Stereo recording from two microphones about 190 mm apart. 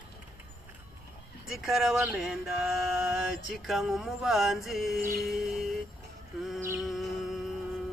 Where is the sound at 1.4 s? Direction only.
Centre (ahead or behind).